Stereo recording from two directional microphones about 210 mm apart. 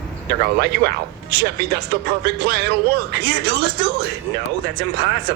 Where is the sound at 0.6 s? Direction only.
50° right (ahead or behind).